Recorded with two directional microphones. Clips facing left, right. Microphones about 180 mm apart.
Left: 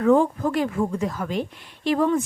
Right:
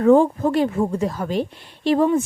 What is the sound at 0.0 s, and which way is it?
A woman's voice, 30° right (ahead or behind).